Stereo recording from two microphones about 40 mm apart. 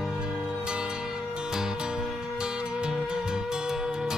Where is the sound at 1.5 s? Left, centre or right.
Centre.